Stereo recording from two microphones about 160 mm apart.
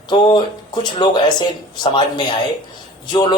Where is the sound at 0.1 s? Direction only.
30° left (ahead or behind).